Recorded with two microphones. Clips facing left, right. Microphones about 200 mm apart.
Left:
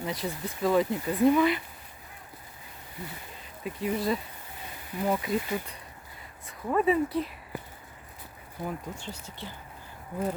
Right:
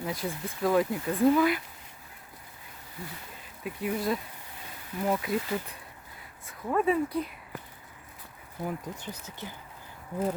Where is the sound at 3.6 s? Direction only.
5° right (ahead or behind).